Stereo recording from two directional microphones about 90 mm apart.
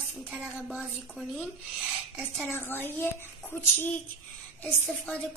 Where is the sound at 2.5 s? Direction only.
25° left (ahead or behind).